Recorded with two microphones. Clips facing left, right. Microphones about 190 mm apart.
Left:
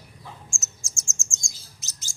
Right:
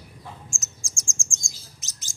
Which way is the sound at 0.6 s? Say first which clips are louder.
Right 2 dB; 15° right (ahead or behind).